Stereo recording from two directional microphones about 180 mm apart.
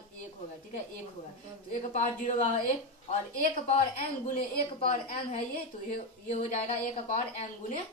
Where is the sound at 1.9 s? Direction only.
40° left (ahead or behind).